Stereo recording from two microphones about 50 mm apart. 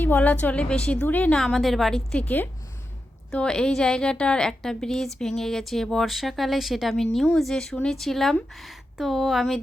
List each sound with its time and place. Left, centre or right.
0.0 s a woman's voice: left
1.0 s a woman's voice: left
1.5 s a woman's voice: centre
2.1 s a woman's voice: left
3.3 s a woman's voice: centre